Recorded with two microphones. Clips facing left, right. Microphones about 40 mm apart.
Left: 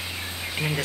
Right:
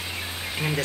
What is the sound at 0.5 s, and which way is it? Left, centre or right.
Speech, centre.